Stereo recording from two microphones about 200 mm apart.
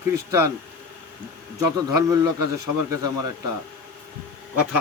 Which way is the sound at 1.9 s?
15° right (ahead or behind).